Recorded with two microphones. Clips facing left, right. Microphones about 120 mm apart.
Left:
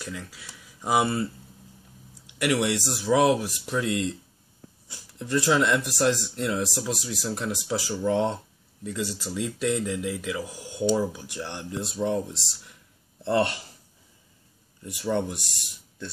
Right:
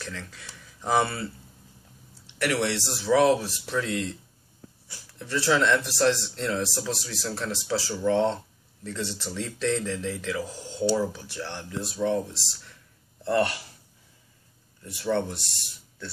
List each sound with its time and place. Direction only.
0.0 s speech: 10° left (ahead or behind); by 13.6 s 25° left (ahead or behind)
14.8 s speech: 15° left (ahead or behind)